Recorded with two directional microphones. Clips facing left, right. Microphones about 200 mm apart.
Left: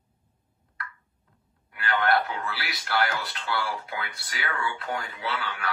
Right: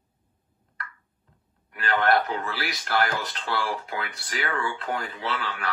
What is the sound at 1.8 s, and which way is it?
A man's voice, 45° right (ahead or behind).